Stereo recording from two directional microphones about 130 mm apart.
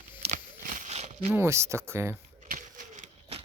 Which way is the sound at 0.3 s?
70° right (ahead or behind).